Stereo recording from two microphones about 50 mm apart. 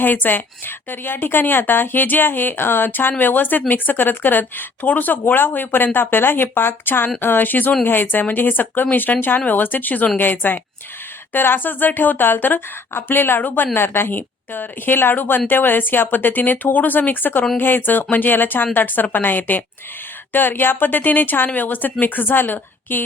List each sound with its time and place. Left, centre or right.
0.0 s speech: left